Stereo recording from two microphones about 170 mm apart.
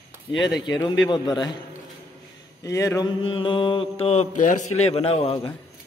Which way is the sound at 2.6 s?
20° left (ahead or behind).